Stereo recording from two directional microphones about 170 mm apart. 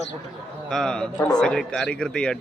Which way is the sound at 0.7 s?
5° left (ahead or behind).